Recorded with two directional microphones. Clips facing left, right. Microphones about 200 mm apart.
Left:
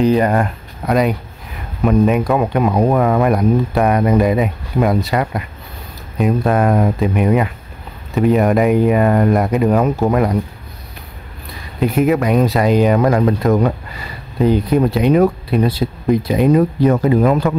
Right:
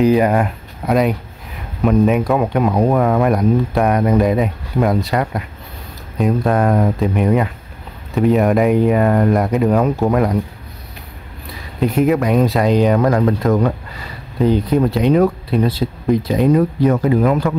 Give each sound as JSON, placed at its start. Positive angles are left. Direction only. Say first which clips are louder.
{"t": 0.0, "sound": "speech", "louder": "right 1 dB", "side_deg": -5}
{"t": 11.8, "sound": "speech", "louder": "even", "side_deg": 5}
{"t": 16.8, "sound": "speech", "louder": "left 1 dB", "side_deg": 30}